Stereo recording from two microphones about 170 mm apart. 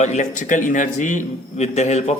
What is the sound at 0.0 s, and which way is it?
A man's voice, 45° left (ahead or behind).